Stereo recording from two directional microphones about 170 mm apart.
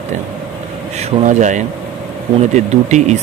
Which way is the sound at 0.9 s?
45° right (ahead or behind).